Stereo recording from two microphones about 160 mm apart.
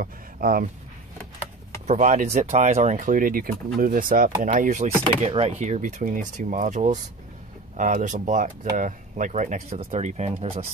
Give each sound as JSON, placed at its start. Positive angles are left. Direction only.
{"t": 0.0, "sound": "speech", "side_deg": -60}
{"t": 1.9, "sound": "speech", "side_deg": -50}
{"t": 5.0, "sound": "speech", "side_deg": -35}